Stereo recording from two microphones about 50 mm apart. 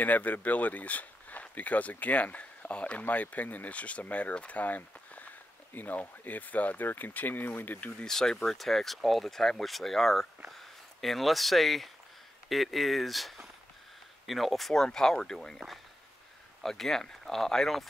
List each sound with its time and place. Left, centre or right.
0.0 s speech: left
8.0 s speech: centre
16.6 s speech: centre